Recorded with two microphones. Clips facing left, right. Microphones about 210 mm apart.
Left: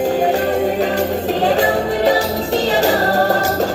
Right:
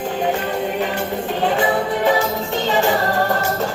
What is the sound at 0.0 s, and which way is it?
Music, 40° left (ahead or behind).